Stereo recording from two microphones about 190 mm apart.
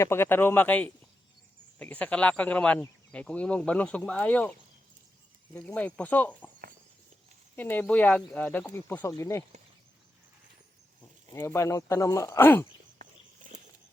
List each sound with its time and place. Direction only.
0.0 s speech: 10° left (ahead or behind)
5.5 s speech: 10° left (ahead or behind)
7.5 s speech: 10° left (ahead or behind)
11.3 s speech: 15° left (ahead or behind)
13.0 s walk: 45° right (ahead or behind)